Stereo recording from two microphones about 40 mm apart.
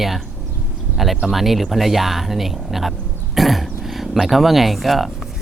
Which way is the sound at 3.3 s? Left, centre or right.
Centre.